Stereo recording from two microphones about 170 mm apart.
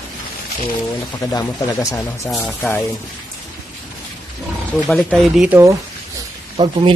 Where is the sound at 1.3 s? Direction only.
20° left (ahead or behind).